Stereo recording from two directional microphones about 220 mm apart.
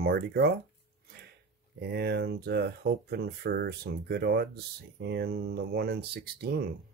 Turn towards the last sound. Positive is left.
turn(degrees=-45)  # may be behind; listen again after turning